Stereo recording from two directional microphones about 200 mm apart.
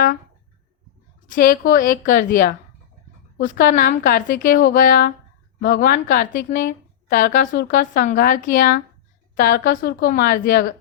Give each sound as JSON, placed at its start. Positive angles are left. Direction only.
{"t": 1.4, "sound": "a woman's voice", "side_deg": 45}